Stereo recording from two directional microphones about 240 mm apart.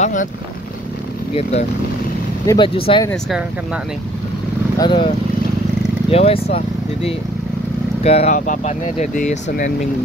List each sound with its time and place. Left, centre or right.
0.0 s speech: left
1.3 s speech: left
3.1 s speech: centre
4.7 s speech: centre